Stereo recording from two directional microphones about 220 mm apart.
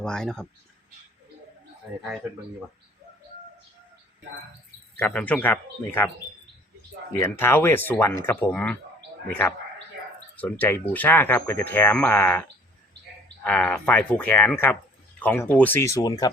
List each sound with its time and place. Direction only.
0.0 s speech: 5° left (ahead or behind)
4.9 s speech: 5° left (ahead or behind)
7.1 s speech: 10° left (ahead or behind)